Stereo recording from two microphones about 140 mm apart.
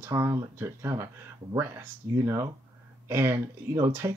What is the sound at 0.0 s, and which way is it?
Speech, 20° right (ahead or behind).